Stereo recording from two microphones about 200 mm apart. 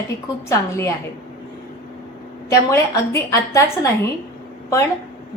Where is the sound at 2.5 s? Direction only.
15° left (ahead or behind).